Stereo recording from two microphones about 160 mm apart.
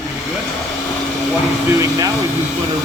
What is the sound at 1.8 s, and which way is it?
Speech, 20° right (ahead or behind).